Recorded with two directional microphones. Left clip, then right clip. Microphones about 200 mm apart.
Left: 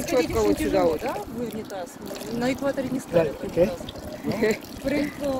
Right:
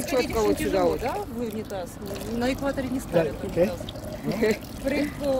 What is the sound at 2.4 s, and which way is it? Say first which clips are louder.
Speech: left 2 dB; 25° right (ahead or behind).